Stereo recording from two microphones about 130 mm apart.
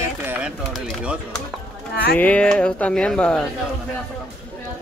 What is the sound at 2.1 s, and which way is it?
Speech, 10° left (ahead or behind).